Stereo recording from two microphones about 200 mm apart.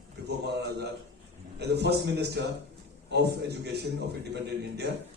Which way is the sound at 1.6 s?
55° right (ahead or behind).